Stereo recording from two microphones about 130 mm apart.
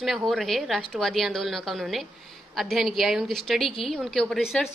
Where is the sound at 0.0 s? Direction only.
Centre (ahead or behind).